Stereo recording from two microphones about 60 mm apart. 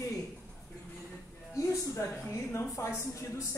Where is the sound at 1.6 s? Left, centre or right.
Left.